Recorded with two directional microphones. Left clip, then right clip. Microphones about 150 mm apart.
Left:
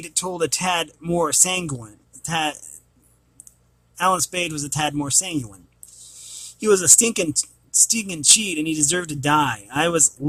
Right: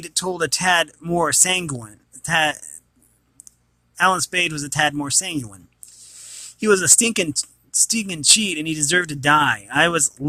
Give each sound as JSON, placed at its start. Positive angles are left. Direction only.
{"t": 0.0, "sound": "speech", "side_deg": -20}
{"t": 3.9, "sound": "speech", "side_deg": -20}